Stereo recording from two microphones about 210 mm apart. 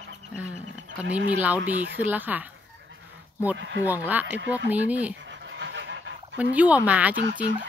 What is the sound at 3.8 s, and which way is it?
Speech, 10° right (ahead or behind).